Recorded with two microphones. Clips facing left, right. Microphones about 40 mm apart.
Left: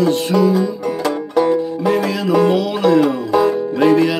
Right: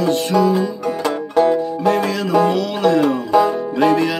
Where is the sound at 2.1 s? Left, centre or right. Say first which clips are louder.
Left 1 dB; centre.